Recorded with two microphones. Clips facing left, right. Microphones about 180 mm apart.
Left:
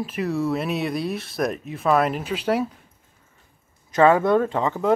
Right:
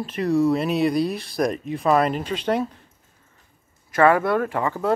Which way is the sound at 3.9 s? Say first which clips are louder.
Left 1 dB; 20° left (ahead or behind).